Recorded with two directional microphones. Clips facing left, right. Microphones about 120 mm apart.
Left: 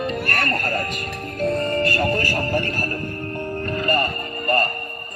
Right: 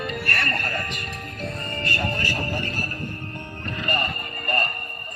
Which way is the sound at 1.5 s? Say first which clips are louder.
Left 10 dB; 35° left (ahead or behind).